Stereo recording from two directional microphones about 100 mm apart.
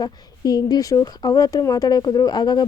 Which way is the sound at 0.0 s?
40° left (ahead or behind).